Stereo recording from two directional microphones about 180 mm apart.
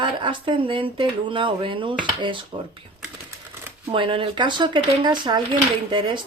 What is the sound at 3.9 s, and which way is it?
Speech, 30° right (ahead or behind).